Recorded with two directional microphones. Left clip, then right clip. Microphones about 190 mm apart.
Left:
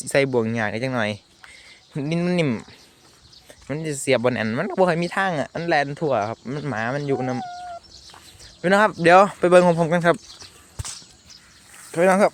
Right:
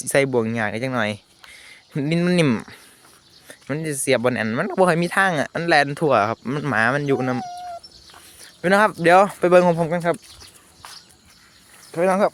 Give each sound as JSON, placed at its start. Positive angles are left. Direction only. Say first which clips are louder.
{"t": 0.0, "sound": "speech", "louder": "right 1 dB", "side_deg": -10}
{"t": 3.5, "sound": "speech", "louder": "right 2 dB", "side_deg": -15}
{"t": 8.6, "sound": "speech", "louder": "even", "side_deg": -5}
{"t": 9.9, "sound": "speech", "louder": "left 3 dB", "side_deg": 10}
{"t": 11.9, "sound": "speech", "louder": "left 2 dB", "side_deg": 10}